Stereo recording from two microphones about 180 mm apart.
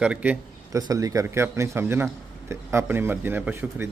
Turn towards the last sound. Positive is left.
turn(degrees=-10)  # may be behind; listen again after turning